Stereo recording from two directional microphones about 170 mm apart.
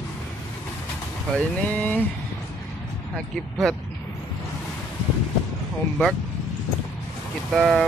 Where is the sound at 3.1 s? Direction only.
Centre (ahead or behind).